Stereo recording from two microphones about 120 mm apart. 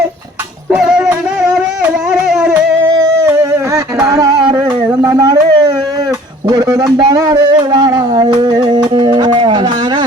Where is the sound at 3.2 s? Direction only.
20° right (ahead or behind).